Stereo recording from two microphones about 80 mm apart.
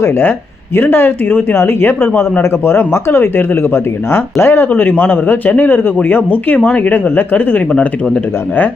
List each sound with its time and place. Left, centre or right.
0.0 s speech: left